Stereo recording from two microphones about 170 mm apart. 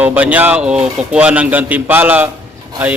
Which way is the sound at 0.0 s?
10° right (ahead or behind).